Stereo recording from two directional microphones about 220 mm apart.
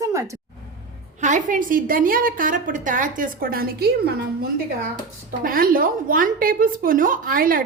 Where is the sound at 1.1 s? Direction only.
35° right (ahead or behind).